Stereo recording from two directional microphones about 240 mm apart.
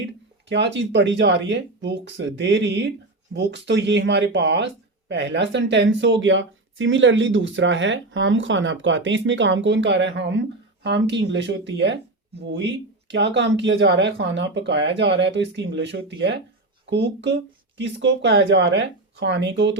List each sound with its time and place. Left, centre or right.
0.4 s speech: right